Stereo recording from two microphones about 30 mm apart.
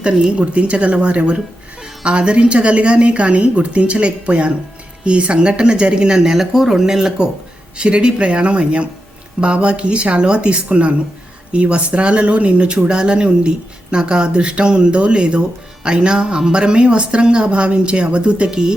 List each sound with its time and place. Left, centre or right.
0.3 s speech: right
6.2 s speech: centre
7.8 s speech: right
18.4 s speech: right